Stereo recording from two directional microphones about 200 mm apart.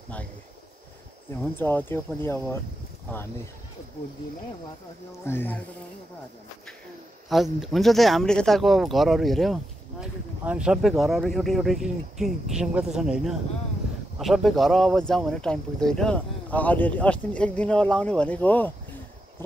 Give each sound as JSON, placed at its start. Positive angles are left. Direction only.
{"t": 1.6, "sound": "speech", "side_deg": 10}
{"t": 5.2, "sound": "speech", "side_deg": 10}
{"t": 7.3, "sound": "speech", "side_deg": 0}